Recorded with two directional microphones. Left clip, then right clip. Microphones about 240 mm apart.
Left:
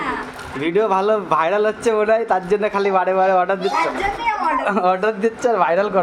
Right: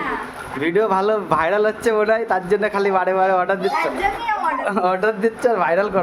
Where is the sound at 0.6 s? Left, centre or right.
Centre.